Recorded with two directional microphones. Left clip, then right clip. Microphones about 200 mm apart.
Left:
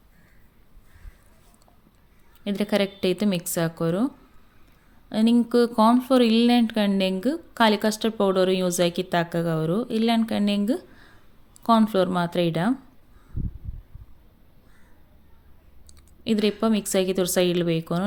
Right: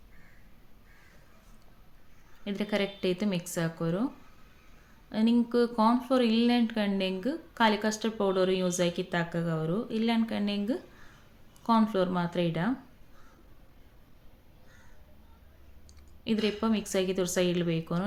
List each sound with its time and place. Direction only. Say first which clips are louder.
2.4 s speech: left 7 dB; 45° left (ahead or behind)
15.9 s speech: left 6 dB; 40° left (ahead or behind)